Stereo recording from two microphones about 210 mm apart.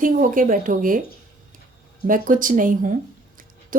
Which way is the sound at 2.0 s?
40° right (ahead or behind).